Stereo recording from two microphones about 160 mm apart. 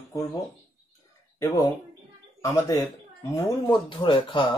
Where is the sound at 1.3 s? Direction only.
20° left (ahead or behind).